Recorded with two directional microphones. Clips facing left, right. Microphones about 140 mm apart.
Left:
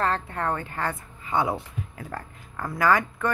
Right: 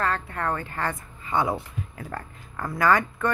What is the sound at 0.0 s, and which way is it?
A woman's voice, 25° left (ahead or behind).